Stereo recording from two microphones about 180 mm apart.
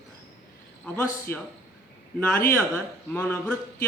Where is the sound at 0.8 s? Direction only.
10° left (ahead or behind).